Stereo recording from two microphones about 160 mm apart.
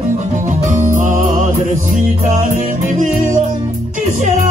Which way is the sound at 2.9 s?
55° right (ahead or behind).